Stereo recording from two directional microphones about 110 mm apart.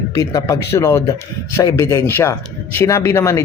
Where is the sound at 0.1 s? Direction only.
35° left (ahead or behind).